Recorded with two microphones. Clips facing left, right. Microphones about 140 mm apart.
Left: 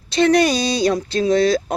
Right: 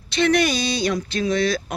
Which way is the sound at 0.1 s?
30° left (ahead or behind).